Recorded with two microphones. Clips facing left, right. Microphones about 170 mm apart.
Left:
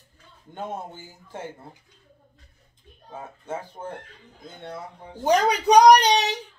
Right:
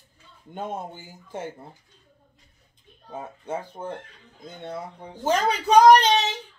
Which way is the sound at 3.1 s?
15° right (ahead or behind).